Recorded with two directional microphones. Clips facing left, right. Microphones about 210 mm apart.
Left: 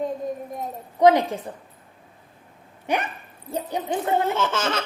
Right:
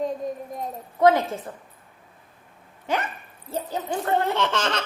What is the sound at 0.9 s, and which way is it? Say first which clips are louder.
Speech: left 2 dB; 15° left (ahead or behind).